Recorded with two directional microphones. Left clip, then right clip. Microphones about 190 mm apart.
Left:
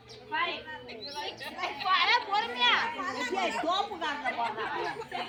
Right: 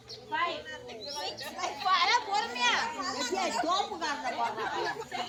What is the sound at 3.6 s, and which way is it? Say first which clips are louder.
Chatter: even; 25° left (ahead or behind).